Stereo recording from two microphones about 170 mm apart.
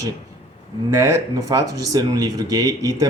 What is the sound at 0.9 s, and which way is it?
Speech, 15° right (ahead or behind).